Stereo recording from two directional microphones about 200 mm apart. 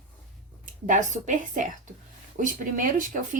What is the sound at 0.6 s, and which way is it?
A woman's voice, 40° right (ahead or behind).